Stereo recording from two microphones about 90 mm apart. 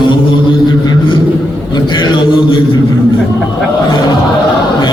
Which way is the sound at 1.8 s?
55° left (ahead or behind).